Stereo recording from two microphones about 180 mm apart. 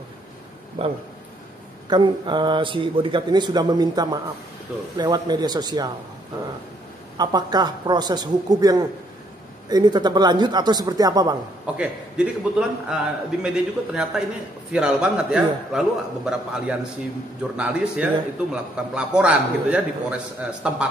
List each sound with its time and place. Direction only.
0.8 s a man's voice: 30° right (ahead or behind)
7.2 s a man's voice: 20° right (ahead or behind)
11.6 s a man's voice: 5° right (ahead or behind)